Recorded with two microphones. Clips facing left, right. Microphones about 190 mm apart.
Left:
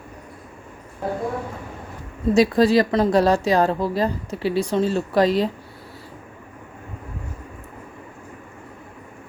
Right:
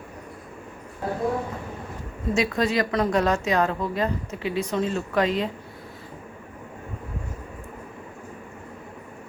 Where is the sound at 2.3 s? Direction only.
35° left (ahead or behind).